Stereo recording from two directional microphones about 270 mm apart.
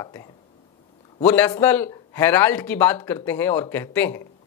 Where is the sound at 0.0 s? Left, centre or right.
Centre.